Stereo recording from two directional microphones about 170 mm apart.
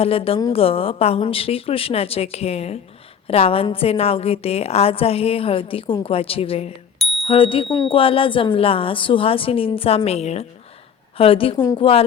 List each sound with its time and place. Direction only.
0.0 s a woman's voice: 35° left (ahead or behind)